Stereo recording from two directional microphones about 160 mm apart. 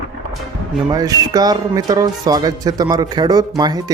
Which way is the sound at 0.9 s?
25° right (ahead or behind).